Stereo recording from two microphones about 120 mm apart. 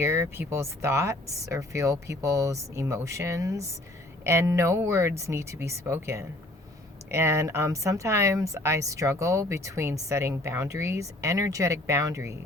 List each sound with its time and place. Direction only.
0.0 s speech: 20° right (ahead or behind)